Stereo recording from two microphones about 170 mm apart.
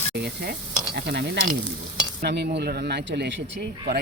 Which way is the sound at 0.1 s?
75° right (ahead or behind).